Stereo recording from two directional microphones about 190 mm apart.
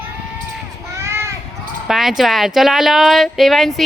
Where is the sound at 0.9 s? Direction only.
15° right (ahead or behind).